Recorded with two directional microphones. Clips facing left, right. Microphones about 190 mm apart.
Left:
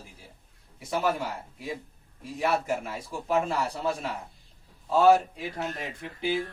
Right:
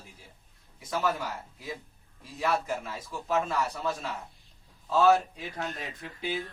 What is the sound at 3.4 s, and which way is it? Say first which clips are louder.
Speech: left 2 dB; 30° left (ahead or behind).